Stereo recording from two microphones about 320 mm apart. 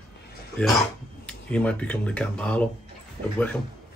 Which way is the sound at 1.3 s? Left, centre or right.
Centre.